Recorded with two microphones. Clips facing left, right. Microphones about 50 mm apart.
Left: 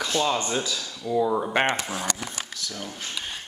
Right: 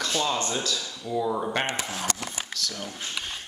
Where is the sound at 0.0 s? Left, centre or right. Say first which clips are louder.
Left 2 dB; centre.